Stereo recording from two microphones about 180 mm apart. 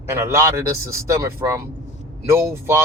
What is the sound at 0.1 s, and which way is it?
Speech, 15° right (ahead or behind).